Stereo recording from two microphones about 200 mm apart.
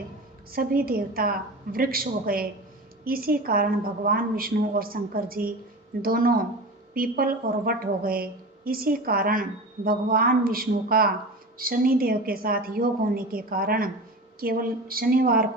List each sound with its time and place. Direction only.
0.5 s a woman's voice: 45° right (ahead or behind)